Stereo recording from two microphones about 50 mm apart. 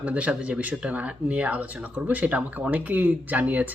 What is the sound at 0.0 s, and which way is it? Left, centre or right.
Speech, right.